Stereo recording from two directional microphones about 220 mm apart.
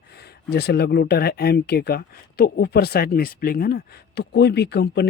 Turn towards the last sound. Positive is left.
turn(degrees=50)  # may be behind; listen again after turning